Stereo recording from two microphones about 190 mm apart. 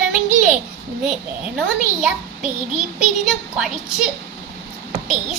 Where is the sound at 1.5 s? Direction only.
5° right (ahead or behind).